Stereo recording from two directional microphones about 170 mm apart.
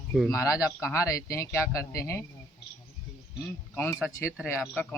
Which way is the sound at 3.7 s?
15° left (ahead or behind).